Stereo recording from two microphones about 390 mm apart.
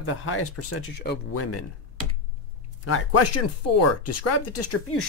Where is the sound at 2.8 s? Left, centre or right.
Left.